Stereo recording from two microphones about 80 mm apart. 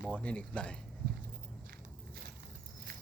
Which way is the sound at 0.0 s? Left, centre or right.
Centre.